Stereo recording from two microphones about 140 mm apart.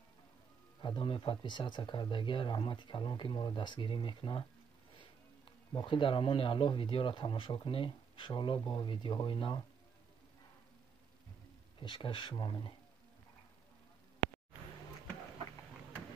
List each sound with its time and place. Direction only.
0.8 s speech: 35° left (ahead or behind)
5.8 s speech: 35° left (ahead or behind)
11.8 s speech: 35° left (ahead or behind)